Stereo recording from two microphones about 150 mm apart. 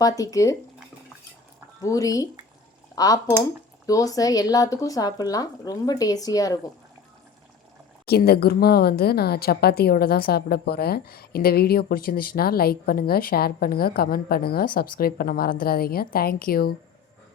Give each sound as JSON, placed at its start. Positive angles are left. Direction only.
{"t": 0.0, "sound": "speech", "side_deg": 25}
{"t": 1.8, "sound": "speech", "side_deg": 20}
{"t": 2.9, "sound": "cutlery", "side_deg": 25}
{"t": 3.8, "sound": "speech", "side_deg": 25}
{"t": 8.0, "sound": "speech", "side_deg": 90}